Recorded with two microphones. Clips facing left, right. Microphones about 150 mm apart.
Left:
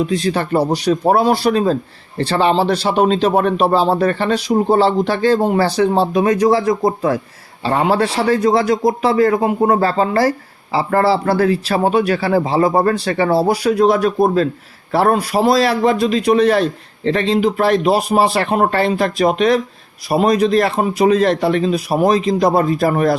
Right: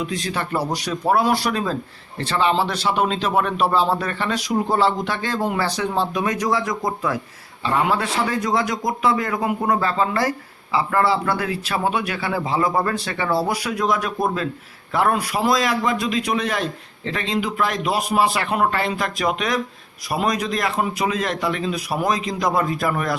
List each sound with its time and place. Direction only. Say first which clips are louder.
0.0 s a man's voice: left 8 dB; 30° left (ahead or behind)